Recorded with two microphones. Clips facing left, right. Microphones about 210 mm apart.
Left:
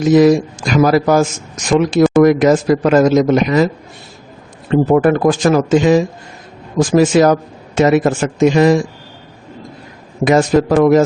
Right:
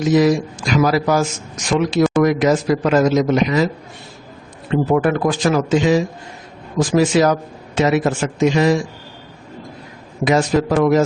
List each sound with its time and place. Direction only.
0.1 s speech: 50° left (ahead or behind)
4.7 s speech: 45° left (ahead or behind)
10.2 s speech: 50° left (ahead or behind)